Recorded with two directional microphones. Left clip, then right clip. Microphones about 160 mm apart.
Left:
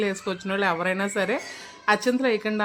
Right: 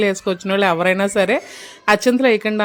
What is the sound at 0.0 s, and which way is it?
Speech, 40° right (ahead or behind).